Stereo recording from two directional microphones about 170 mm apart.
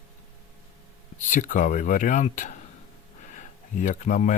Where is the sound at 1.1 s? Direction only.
45° left (ahead or behind).